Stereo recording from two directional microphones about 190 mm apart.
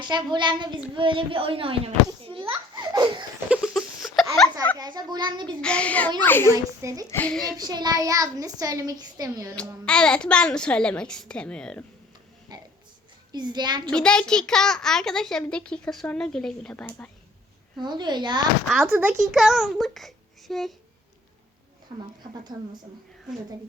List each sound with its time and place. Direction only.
0.0 s a child's voice: 25° right (ahead or behind)
2.5 s laughter: 20° right (ahead or behind)
3.5 s a sound: centre (ahead or behind)
4.8 s a child's voice: 20° right (ahead or behind)
5.6 s a child's voice: 5° left (ahead or behind)
6.8 s a child's voice: 20° right (ahead or behind)
7.1 s a child's voice: 10° left (ahead or behind)
7.5 s a child's voice: 20° right (ahead or behind)
9.8 s a child's voice: 5° left (ahead or behind)
12.5 s a sound: 20° right (ahead or behind)
13.3 s a child's voice: 25° right (ahead or behind)
13.9 s a child's voice: 5° left (ahead or behind)
17.7 s a child's voice: 25° right (ahead or behind)
18.7 s a child's voice: 5° right (ahead or behind)